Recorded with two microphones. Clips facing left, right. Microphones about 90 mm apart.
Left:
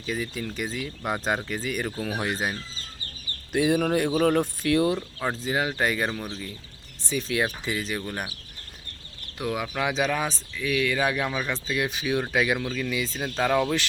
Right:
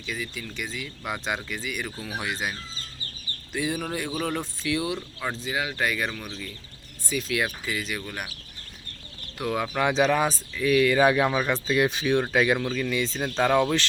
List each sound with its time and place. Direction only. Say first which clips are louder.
0.0 s speech: left 4 dB; 40° left (ahead or behind)
3.5 s speech: left 7 dB; 55° left (ahead or behind)
5.5 s speech: left 2 dB; 35° left (ahead or behind)
9.4 s speech: right 2 dB; 10° left (ahead or behind)
11.9 s speech: right 3 dB; 5° left (ahead or behind)